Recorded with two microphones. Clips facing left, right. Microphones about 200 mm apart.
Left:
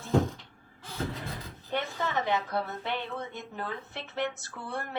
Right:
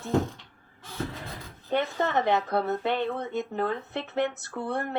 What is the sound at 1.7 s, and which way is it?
A woman's voice, 60° right (ahead or behind).